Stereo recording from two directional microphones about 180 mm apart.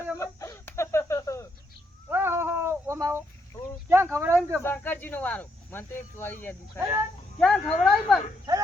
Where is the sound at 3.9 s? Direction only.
15° right (ahead or behind).